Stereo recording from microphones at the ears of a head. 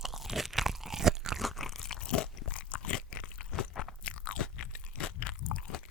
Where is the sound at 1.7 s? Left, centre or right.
Left.